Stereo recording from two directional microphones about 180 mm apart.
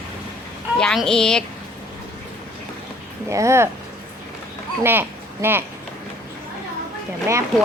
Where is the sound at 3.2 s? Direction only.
15° right (ahead or behind).